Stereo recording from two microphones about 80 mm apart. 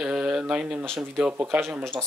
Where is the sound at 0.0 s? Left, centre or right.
Centre.